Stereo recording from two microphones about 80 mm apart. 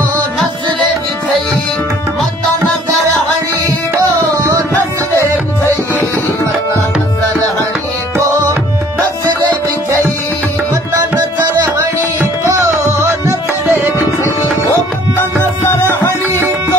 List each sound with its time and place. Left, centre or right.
4.4 s music: right
8.3 s tabla: right
10.7 s music: right
11.7 s music: right
13.7 s tabla: right
13.9 s tabla: left